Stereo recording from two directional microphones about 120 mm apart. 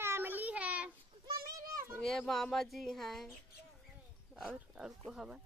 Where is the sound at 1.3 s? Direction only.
30° right (ahead or behind).